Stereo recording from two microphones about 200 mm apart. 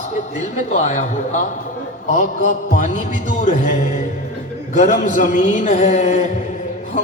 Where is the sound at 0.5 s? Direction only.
35° left (ahead or behind).